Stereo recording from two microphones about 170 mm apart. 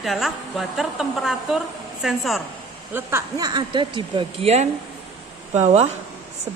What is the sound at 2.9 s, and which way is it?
Speech, 20° right (ahead or behind).